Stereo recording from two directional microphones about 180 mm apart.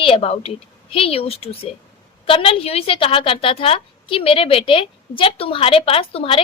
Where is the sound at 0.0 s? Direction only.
30° left (ahead or behind).